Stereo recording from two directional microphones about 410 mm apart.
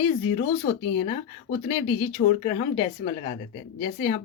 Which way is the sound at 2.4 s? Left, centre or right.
Centre.